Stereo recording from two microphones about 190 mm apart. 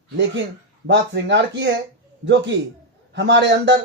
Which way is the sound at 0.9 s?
70° right (ahead or behind).